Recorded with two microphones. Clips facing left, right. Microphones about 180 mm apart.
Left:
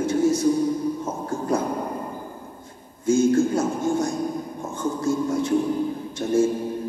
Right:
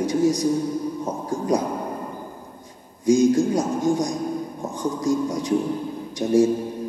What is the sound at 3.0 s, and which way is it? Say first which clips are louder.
Speech: right 1 dB; 15° right (ahead or behind).